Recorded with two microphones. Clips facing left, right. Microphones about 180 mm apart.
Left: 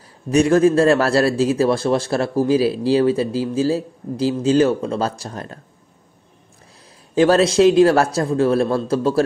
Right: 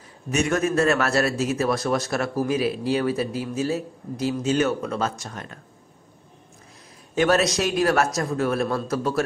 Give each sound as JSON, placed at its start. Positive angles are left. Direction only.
{"t": 0.3, "sound": "a man's voice", "side_deg": 30}
{"t": 7.2, "sound": "a man's voice", "side_deg": 30}